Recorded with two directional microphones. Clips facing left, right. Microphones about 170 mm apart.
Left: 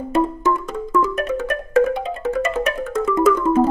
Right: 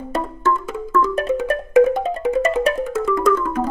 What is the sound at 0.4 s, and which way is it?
Music, 15° left (ahead or behind).